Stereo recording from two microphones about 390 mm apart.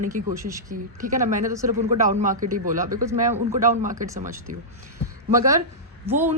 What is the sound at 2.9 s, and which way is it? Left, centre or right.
Speech, centre.